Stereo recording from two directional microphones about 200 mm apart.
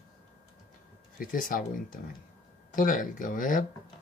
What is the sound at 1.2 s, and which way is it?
Speech, 45° left (ahead or behind).